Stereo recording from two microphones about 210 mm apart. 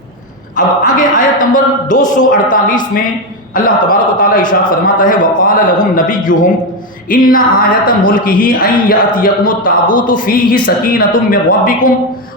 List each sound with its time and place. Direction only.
0.5 s speech: 40° left (ahead or behind)